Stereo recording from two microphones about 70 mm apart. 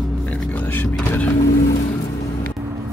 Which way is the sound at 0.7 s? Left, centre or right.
Left.